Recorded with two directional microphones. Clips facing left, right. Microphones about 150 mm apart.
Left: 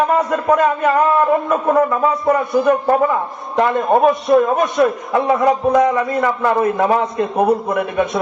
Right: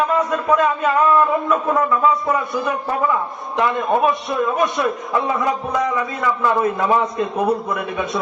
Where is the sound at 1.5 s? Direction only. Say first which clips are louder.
Left 3 dB; 45° left (ahead or behind).